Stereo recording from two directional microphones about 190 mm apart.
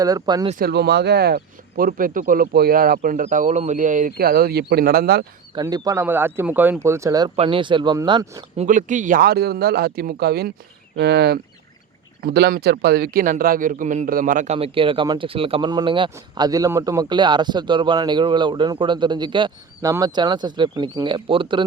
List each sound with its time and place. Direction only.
0.0 s speech: 20° right (ahead or behind)
0.6 s speech: 60° right (ahead or behind)
5.5 s a man's voice: 20° right (ahead or behind)
8.5 s speech: 40° right (ahead or behind)